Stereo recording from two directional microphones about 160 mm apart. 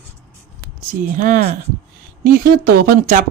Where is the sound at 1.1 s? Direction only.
55° right (ahead or behind).